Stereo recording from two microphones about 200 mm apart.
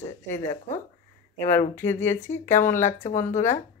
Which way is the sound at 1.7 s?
10° left (ahead or behind).